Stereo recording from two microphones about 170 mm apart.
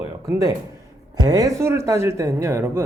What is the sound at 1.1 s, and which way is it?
Speech, 20° right (ahead or behind).